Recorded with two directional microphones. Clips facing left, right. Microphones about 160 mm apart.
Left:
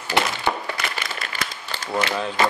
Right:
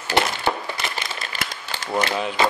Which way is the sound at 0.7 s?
25° right (ahead or behind).